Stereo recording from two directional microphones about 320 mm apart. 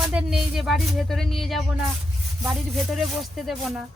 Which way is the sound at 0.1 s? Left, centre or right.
Centre.